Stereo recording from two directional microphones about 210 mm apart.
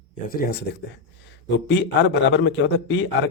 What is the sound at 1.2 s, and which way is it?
A man's voice, 55° left (ahead or behind).